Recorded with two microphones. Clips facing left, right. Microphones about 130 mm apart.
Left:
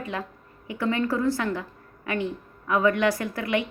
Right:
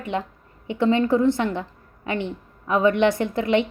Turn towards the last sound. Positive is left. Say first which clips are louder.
# right 6 dB
turn(degrees=-25)  # may be behind; listen again after turning